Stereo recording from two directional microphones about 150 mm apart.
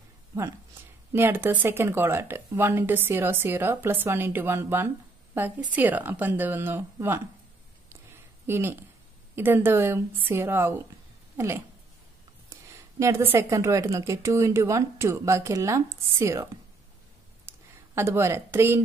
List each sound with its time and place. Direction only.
1.1 s speech: 15° right (ahead or behind)
8.5 s speech: 15° right (ahead or behind)
13.0 s a woman's voice: 20° right (ahead or behind)
17.5 s a sound: 15° right (ahead or behind)